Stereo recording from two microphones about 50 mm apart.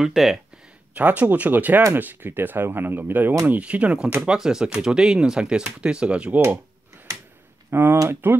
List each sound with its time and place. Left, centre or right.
0.0 s speech: centre
0.9 s speech: right
3.4 s speech: right
4.2 s speech: centre
7.7 s speech: right